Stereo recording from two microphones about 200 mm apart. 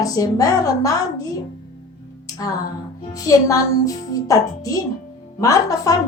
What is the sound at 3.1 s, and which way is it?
Speech, 15° left (ahead or behind).